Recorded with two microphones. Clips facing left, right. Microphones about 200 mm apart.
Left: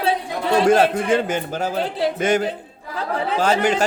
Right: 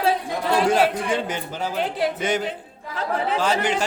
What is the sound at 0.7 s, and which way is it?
A man's voice, 50° left (ahead or behind).